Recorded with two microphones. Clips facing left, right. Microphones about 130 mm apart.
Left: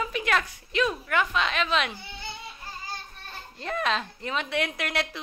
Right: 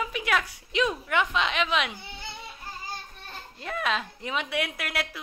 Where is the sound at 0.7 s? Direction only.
20° right (ahead or behind).